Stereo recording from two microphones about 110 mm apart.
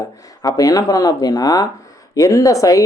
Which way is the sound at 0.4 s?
35° left (ahead or behind).